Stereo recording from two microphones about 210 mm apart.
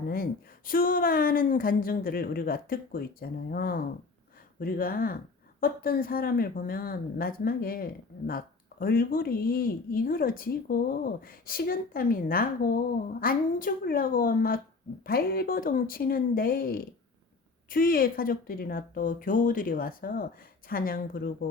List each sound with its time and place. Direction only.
0.1 s speech: 45° left (ahead or behind)